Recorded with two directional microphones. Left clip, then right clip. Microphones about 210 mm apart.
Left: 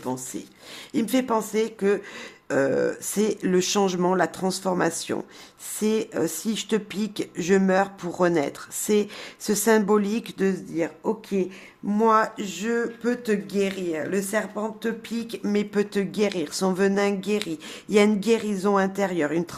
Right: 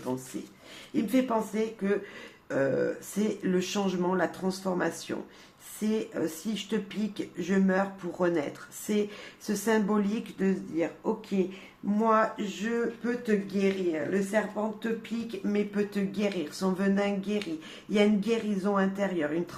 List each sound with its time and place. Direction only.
0.9 s speech: 45° left (ahead or behind)
11.9 s speech: 50° left (ahead or behind)